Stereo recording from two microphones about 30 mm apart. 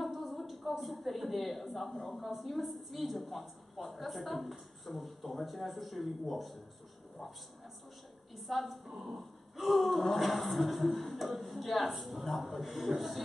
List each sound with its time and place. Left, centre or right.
0.0 s a woman's voice: centre
8.4 s a woman's voice: centre
8.8 s a woman's voice: centre
9.6 s a woman's voice: centre